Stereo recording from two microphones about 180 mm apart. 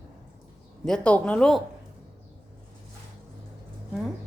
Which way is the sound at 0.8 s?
5° left (ahead or behind).